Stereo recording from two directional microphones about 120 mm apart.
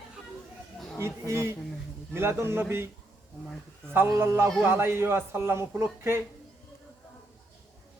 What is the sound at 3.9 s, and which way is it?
Speech, 20° right (ahead or behind).